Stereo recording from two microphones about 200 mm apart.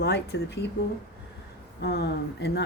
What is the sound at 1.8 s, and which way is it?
Speech, 55° left (ahead or behind).